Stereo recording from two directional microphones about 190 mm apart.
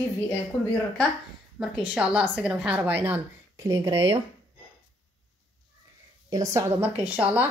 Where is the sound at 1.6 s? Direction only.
5° right (ahead or behind); by 4.2 s 20° right (ahead or behind).